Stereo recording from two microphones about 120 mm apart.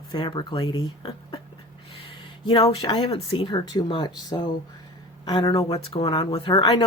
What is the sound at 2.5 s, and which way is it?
Speech, 35° left (ahead or behind).